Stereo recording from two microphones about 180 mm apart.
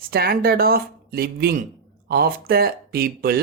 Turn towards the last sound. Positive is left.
turn(degrees=-55)  # may be behind; listen again after turning